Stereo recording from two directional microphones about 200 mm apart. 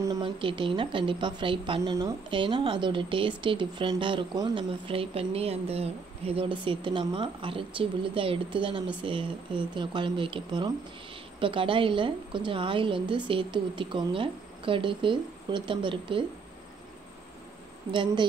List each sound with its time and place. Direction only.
0.0 s a woman's voice: 20° right (ahead or behind)